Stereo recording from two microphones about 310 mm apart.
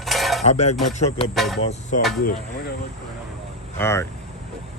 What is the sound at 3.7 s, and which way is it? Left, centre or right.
Speech, centre.